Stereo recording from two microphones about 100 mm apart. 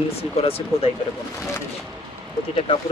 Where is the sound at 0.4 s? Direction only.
75° left (ahead or behind).